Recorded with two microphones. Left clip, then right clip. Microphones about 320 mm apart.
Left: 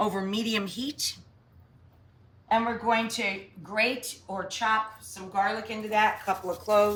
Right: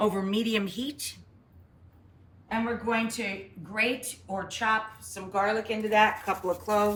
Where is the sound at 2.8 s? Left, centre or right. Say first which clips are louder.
Left 3 dB; centre.